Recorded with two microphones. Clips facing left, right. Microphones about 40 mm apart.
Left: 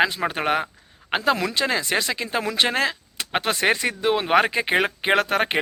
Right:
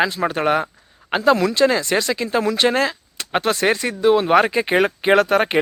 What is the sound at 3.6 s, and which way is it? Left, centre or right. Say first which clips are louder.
Speech: right 2 dB; left.